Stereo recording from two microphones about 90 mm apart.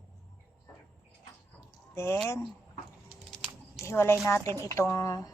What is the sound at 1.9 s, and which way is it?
Speech, 30° left (ahead or behind).